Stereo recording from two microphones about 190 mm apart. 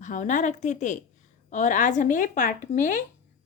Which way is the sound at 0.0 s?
40° left (ahead or behind).